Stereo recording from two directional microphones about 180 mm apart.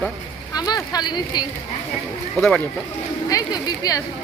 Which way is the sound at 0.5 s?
20° left (ahead or behind).